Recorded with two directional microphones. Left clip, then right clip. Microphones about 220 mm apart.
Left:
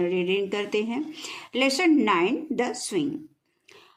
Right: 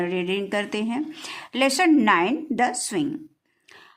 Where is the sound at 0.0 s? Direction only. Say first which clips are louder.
Left 1 dB; 25° right (ahead or behind).